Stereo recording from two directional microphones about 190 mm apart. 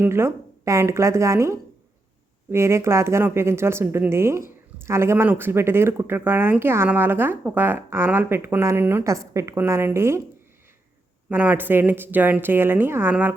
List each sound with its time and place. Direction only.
0.0 s a woman's voice: 15° right (ahead or behind)
11.3 s a woman's voice: 10° right (ahead or behind)